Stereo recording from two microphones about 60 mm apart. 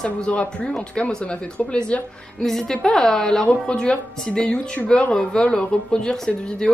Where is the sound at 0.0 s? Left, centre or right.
Centre.